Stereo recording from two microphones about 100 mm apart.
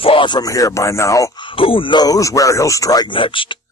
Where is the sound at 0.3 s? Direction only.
35° left (ahead or behind).